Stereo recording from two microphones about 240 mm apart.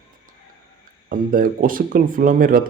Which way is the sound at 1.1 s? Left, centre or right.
Right.